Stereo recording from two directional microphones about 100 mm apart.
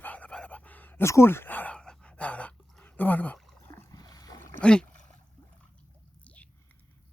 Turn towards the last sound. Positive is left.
turn(degrees=15)  # may be behind; listen again after turning